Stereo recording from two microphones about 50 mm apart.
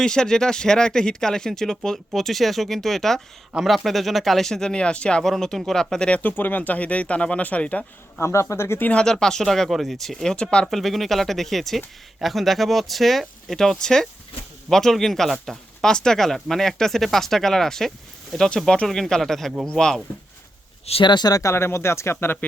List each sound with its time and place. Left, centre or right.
0.0 s speech: centre
5.2 s speech: centre
6.2 s speech: left
8.2 s speech: left
9.0 s speech: centre
10.3 s speech: centre
10.7 s speech: centre
21.4 s speech: left